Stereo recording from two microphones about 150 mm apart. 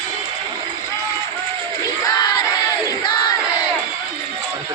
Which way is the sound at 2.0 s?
25° left (ahead or behind).